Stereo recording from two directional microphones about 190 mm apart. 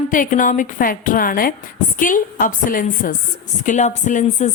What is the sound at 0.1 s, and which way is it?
A woman's voice, 45° left (ahead or behind).